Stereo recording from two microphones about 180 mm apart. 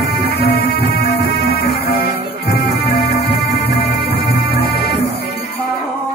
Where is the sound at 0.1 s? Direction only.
60° left (ahead or behind).